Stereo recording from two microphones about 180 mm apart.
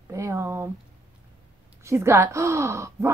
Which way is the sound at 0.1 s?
15° right (ahead or behind).